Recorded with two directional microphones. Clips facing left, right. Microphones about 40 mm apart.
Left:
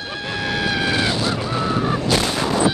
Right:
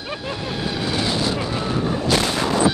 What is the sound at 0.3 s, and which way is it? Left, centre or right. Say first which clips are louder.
Vehicle: left 5 dB; left.